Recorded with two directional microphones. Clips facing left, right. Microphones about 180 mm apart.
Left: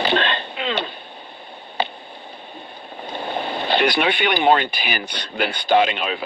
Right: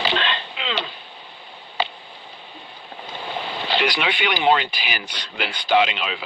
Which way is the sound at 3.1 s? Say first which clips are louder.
Left 4 dB; 50° left (ahead or behind).